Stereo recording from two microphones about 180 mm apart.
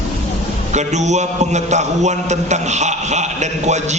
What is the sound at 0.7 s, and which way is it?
A man's voice, 40° right (ahead or behind).